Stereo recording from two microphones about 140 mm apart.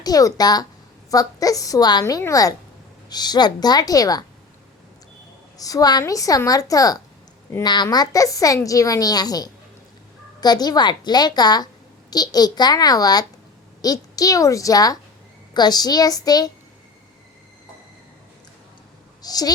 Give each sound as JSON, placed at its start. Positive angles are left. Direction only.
{"t": 0.0, "sound": "a woman's voice", "side_deg": 25}
{"t": 5.5, "sound": "a woman's voice", "side_deg": 25}
{"t": 19.2, "sound": "speech", "side_deg": 25}